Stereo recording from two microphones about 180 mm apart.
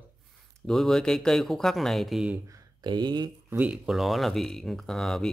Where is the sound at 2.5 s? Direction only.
25° right (ahead or behind).